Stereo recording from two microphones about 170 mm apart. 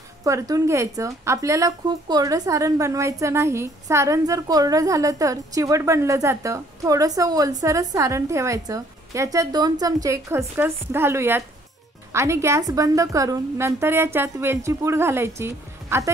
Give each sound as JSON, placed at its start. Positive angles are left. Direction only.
{"t": 0.2, "sound": "a woman's voice", "side_deg": -20}